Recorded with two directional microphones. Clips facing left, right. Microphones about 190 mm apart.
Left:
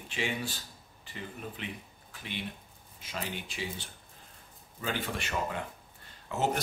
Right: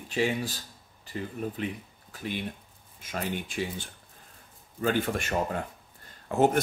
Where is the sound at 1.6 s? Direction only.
40° right (ahead or behind).